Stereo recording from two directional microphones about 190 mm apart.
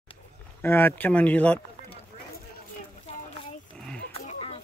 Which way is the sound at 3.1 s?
30° left (ahead or behind).